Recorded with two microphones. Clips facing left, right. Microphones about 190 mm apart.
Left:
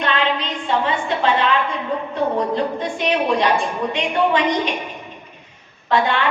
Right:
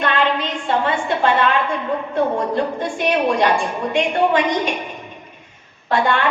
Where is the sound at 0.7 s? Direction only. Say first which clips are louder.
Right 1 dB; 50° right (ahead or behind).